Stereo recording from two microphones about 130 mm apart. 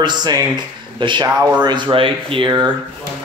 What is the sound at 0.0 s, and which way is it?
Speech, 35° right (ahead or behind).